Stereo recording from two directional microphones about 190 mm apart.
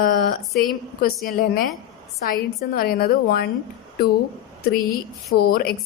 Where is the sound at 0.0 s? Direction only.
50° left (ahead or behind).